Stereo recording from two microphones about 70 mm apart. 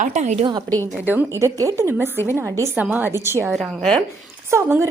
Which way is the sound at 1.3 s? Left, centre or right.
Right.